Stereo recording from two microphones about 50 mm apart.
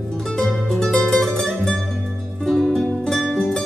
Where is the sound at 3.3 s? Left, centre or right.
Centre.